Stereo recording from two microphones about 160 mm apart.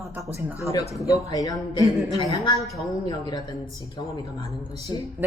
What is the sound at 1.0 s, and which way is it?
Speech, 25° left (ahead or behind).